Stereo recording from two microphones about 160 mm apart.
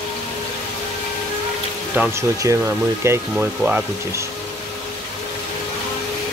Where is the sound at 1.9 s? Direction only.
10° right (ahead or behind).